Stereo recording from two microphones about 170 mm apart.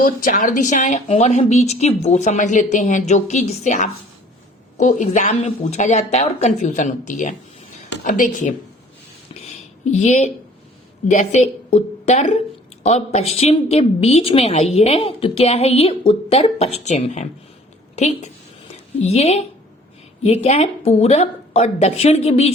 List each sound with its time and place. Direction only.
0.0 s speech: 55° left (ahead or behind)
9.3 s a sound: 40° left (ahead or behind)
11.1 s a woman's voice: 40° left (ahead or behind)